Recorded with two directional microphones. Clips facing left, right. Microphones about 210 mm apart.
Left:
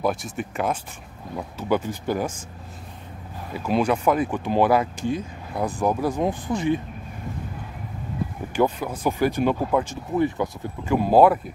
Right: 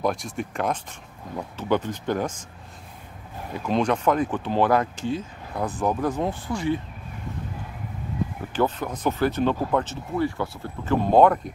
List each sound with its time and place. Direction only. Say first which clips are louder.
0.0 s speech: left 1 dB; 5° left (ahead or behind)
3.6 s speech: left 1 dB; 5° left (ahead or behind)
8.5 s speech: left 2 dB; 10° left (ahead or behind)
11.1 s speech: left 1 dB; 5° left (ahead or behind)